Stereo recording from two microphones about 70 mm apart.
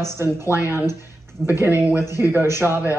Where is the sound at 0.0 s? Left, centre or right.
Right.